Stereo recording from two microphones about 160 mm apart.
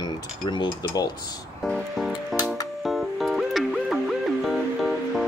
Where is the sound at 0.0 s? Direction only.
30° left (ahead or behind).